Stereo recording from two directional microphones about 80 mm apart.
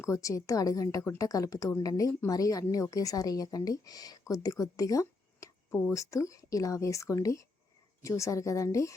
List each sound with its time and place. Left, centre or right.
0.0 s a woman's voice: left